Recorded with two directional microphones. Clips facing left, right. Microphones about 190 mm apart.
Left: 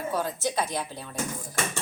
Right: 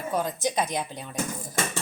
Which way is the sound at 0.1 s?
15° right (ahead or behind).